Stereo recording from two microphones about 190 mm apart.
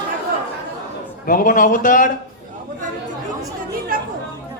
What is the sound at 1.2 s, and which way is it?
Speech, 45° left (ahead or behind).